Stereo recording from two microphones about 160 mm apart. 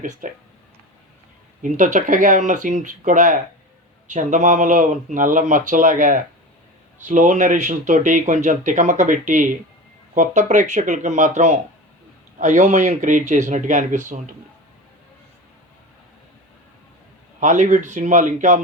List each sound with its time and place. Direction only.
0.0 s speech: 55° right (ahead or behind)
1.6 s speech: 55° right (ahead or behind)
17.4 s speech: 50° right (ahead or behind)